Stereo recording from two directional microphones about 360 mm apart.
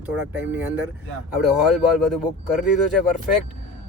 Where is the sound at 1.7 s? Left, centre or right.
Centre.